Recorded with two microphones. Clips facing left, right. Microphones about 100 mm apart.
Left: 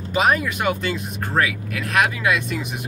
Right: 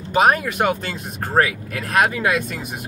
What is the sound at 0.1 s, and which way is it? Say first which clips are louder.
Speech: right 3 dB; 50° right (ahead or behind).